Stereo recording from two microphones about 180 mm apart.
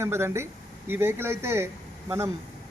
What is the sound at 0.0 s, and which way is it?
Speech, 15° right (ahead or behind).